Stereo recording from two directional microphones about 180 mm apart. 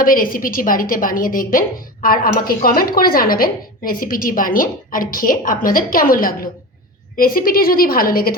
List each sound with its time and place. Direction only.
0.0 s speech: 50° left (ahead or behind)